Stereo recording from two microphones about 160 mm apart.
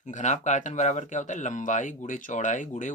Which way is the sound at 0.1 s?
50° left (ahead or behind).